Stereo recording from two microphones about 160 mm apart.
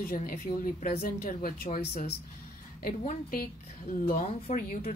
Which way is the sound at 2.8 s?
60° left (ahead or behind).